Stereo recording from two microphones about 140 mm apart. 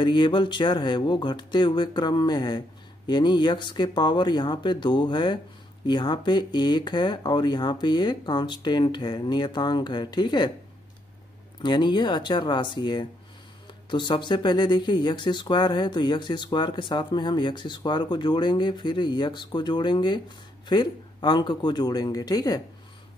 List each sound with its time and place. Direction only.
0.0 s speech: 35° left (ahead or behind)
11.6 s speech: 30° left (ahead or behind)